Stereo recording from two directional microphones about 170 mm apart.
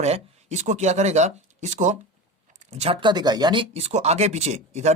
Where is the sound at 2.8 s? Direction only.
30° right (ahead or behind).